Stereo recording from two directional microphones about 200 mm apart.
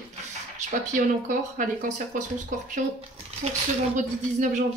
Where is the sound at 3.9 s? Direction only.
40° right (ahead or behind).